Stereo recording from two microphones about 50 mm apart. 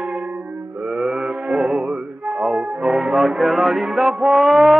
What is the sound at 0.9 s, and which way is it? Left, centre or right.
Mantra, centre.